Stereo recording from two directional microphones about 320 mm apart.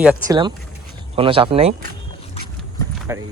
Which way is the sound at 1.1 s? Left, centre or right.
Centre.